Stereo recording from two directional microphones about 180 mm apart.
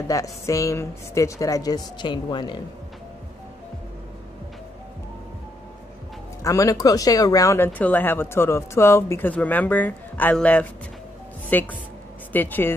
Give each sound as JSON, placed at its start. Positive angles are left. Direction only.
{"t": 0.1, "sound": "a woman's voice", "side_deg": 20}
{"t": 6.4, "sound": "speech", "side_deg": 20}